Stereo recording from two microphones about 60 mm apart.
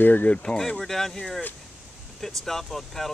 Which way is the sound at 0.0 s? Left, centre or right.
Left.